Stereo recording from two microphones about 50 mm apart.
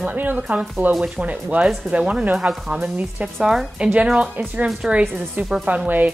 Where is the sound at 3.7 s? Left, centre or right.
Right.